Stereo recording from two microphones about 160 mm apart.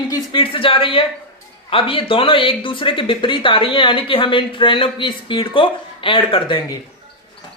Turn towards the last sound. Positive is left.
turn(degrees=30)  # may be behind; listen again after turning